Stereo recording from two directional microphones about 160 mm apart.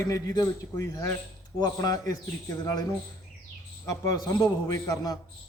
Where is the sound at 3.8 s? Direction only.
25° left (ahead or behind).